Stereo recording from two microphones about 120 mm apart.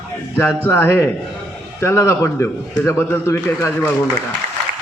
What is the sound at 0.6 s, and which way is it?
A man's voice, 20° left (ahead or behind).